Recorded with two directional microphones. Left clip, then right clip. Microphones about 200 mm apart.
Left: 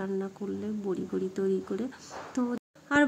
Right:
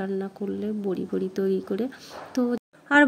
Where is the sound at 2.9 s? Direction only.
25° right (ahead or behind).